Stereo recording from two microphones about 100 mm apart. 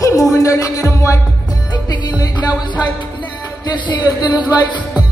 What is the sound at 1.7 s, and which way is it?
Music, 45° left (ahead or behind).